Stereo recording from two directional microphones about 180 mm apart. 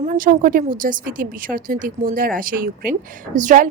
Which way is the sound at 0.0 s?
45° right (ahead or behind).